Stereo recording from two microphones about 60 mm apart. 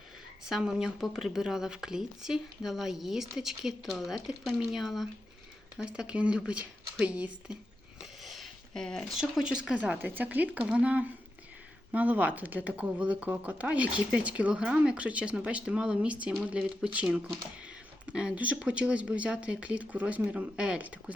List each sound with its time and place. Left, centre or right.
0.4 s speech: centre
5.7 s speech: centre
8.2 s a sound: centre
9.1 s speech: centre
10.0 s speech: right